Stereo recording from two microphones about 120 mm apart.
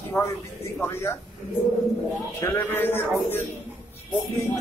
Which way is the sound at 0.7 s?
20° left (ahead or behind).